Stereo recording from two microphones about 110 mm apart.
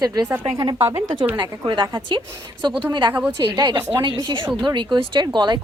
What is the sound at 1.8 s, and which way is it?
A woman's voice, 50° right (ahead or behind).